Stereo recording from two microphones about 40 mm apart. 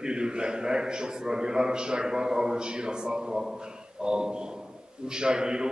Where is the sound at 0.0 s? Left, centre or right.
Right.